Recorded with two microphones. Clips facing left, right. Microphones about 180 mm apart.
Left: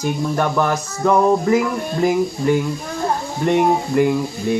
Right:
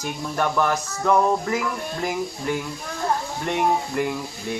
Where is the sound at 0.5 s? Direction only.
10° left (ahead or behind).